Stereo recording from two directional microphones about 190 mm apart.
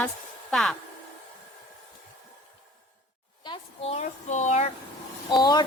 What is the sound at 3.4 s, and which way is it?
A woman's voice, 30° left (ahead or behind).